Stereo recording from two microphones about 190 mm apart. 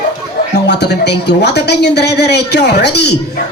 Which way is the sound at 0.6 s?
60° left (ahead or behind).